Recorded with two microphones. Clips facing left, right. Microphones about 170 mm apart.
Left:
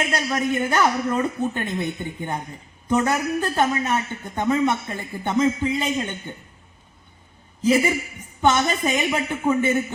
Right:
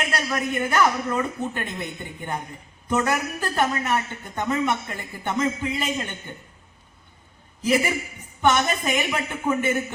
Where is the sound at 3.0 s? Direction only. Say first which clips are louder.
Left 3 dB; 25° left (ahead or behind).